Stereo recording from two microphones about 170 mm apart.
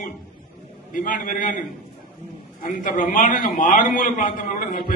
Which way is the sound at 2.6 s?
50° left (ahead or behind).